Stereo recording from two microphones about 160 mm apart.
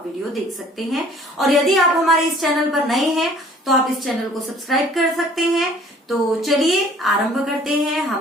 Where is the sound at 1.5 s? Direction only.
Centre (ahead or behind).